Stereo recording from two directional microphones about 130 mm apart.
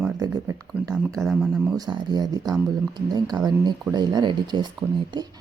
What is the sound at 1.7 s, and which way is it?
Speech, 30° right (ahead or behind).